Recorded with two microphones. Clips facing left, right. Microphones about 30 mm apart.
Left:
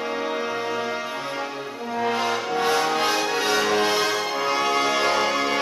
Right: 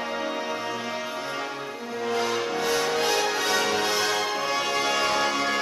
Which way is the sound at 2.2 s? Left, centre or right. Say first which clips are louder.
Left 3 dB; centre.